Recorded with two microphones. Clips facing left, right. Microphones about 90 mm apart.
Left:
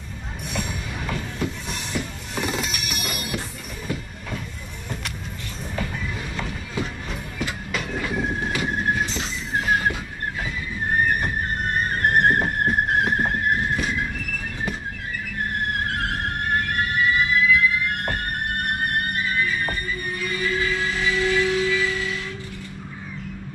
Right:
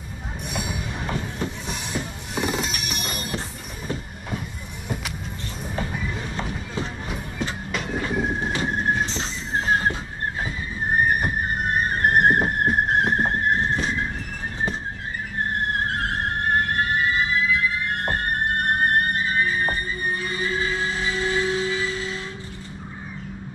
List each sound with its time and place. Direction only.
1.0 s train: 30° right (ahead or behind)
2.3 s music: 5° right (ahead or behind)
3.3 s train: 30° right (ahead or behind)
6.3 s music: 30° right (ahead or behind)
7.7 s train: centre (ahead or behind)
8.6 s squeal: centre (ahead or behind)
9.0 s a sound: 25° right (ahead or behind)
11.1 s music: 5° right (ahead or behind)
13.2 s a sound: 30° right (ahead or behind)
15.9 s music: 25° right (ahead or behind)